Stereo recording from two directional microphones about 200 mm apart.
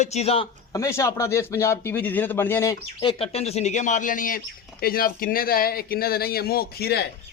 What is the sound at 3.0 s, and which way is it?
Speech, 25° left (ahead or behind).